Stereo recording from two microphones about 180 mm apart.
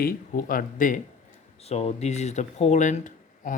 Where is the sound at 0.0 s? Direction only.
55° left (ahead or behind).